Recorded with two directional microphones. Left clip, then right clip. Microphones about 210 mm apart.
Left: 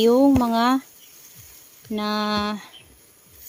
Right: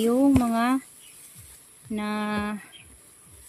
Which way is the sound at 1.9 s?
50° left (ahead or behind).